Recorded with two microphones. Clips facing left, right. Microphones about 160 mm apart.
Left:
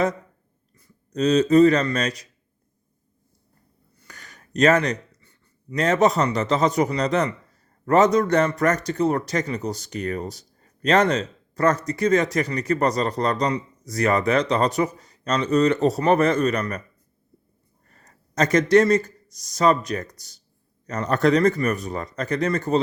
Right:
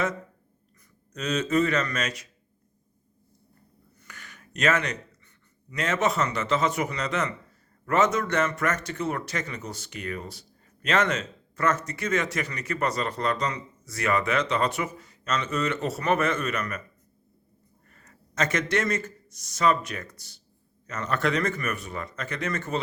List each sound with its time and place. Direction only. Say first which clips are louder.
0.8 s speech: left 12 dB; 35° left (ahead or behind)
4.0 s a sound: left 1 dB; 40° left (ahead or behind)
5.7 s speech: left 7 dB; 40° left (ahead or behind)
17.8 s speech: left 1 dB; 35° left (ahead or behind)